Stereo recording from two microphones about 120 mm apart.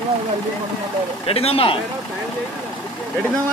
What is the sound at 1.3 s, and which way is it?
Speech, 55° left (ahead or behind).